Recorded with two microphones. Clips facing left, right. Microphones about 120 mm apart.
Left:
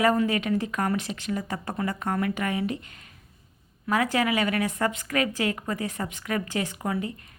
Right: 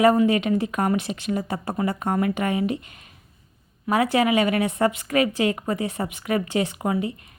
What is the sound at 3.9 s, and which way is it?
Speech, 20° right (ahead or behind).